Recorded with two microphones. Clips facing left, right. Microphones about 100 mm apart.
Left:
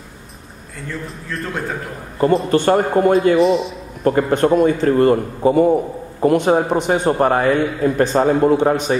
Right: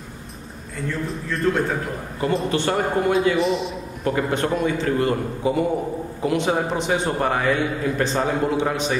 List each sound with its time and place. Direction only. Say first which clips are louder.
0.8 s a man's voice: right 2 dB; centre (ahead or behind)
2.5 s a man's voice: left 7 dB; 45° left (ahead or behind)
3.3 s a man's voice: left 7 dB; centre (ahead or behind)
4.0 s a man's voice: left 7 dB; 45° left (ahead or behind)